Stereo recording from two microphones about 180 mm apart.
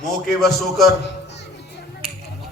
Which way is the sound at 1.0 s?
70° left (ahead or behind).